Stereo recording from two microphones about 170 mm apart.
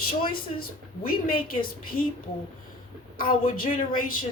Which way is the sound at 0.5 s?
60° left (ahead or behind).